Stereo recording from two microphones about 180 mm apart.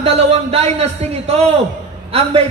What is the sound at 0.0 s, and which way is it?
A man's voice, 35° right (ahead or behind).